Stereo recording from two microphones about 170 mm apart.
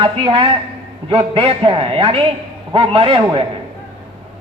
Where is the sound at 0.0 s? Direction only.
30° right (ahead or behind).